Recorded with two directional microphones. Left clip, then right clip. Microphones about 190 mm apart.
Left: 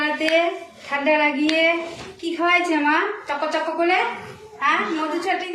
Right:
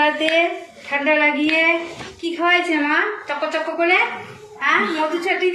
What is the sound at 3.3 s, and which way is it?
Speech, 35° left (ahead or behind).